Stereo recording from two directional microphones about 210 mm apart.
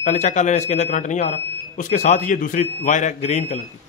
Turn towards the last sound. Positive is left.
turn(degrees=30)  # may be behind; listen again after turning